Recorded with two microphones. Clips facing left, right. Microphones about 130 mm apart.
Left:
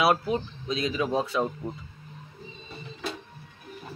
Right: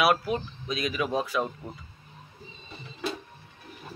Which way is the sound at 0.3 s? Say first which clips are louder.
Left 2 dB; 25° left (ahead or behind).